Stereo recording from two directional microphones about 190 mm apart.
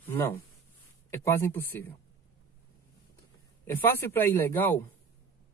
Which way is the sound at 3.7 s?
10° left (ahead or behind).